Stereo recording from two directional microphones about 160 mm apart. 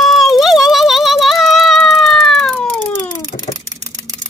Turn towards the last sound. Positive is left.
turn(degrees=45)  # may be behind; listen again after turning